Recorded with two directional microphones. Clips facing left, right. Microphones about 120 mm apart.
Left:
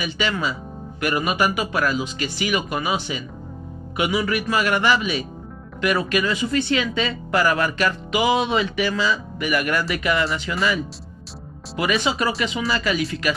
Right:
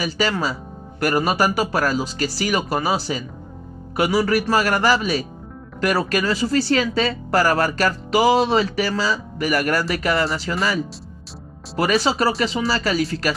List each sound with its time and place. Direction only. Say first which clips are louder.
0.0 s speech: right 2 dB; 40° right (ahead or behind)
11.7 s speech: right 3 dB; 35° right (ahead or behind)